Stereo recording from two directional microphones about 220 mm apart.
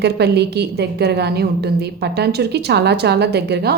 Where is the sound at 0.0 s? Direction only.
50° right (ahead or behind).